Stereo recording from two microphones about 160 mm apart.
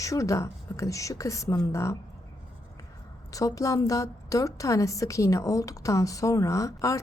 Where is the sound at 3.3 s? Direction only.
20° left (ahead or behind).